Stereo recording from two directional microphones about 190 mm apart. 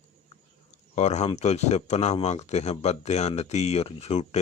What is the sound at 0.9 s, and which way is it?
Speech, 35° left (ahead or behind).